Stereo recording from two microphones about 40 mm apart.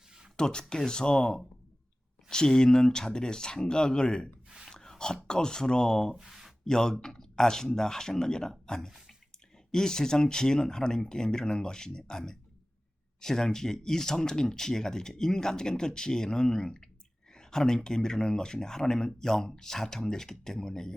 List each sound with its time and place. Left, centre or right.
0.3 s speech: centre
4.4 s a sound: centre
4.7 s speech: centre
6.1 s speech: centre
6.7 s speech: centre